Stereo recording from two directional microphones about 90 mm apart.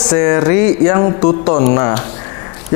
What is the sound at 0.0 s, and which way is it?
Speech, 25° left (ahead or behind).